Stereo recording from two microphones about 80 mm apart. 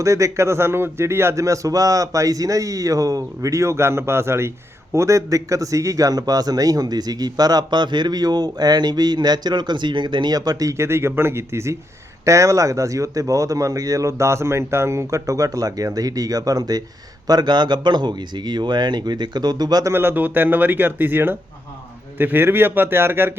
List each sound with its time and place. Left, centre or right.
0.0 s a man's voice: right
10.8 s a man's voice: right
19.9 s speech: right